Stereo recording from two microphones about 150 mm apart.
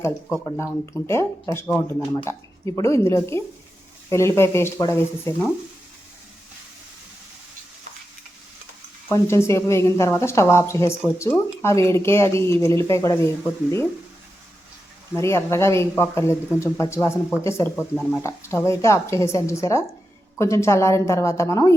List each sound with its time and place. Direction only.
0.4 s a woman's voice: 15° left (ahead or behind)
9.1 s a woman's voice: 20° left (ahead or behind)
15.1 s a woman's voice: 15° left (ahead or behind)